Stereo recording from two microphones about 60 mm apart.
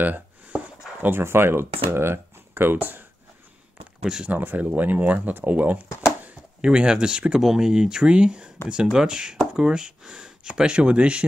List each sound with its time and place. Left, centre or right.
0.0 s a sound: right
1.0 s speech: right
4.0 s speech: centre
4.3 s speech: right
6.6 s speech: centre